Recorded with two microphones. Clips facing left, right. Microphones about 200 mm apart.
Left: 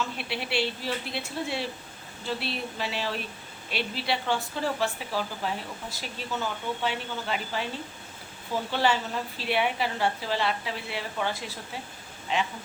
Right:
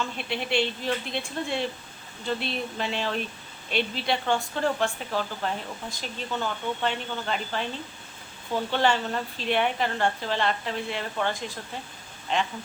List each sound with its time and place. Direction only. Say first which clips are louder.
0.2 s speech: right 6 dB; 5° left (ahead or behind)
8.7 s a woman's voice: right 2 dB; 5° left (ahead or behind)